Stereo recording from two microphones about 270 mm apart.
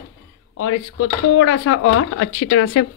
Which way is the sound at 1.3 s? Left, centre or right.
Left.